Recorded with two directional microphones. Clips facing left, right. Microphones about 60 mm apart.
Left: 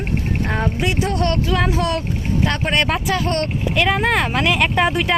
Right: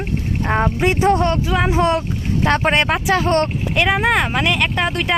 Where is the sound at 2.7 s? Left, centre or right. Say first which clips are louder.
Right 2 dB; right.